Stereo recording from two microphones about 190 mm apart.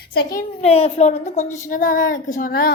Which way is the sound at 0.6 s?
30° left (ahead or behind).